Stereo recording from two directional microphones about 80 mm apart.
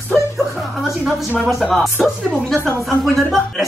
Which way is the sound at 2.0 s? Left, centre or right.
Centre.